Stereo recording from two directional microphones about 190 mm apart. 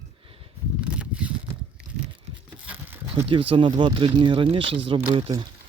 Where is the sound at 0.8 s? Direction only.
5° right (ahead or behind).